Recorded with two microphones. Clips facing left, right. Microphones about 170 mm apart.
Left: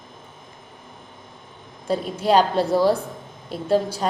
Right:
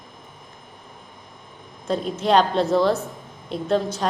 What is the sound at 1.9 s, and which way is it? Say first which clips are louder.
A woman's voice: even; 10° left (ahead or behind).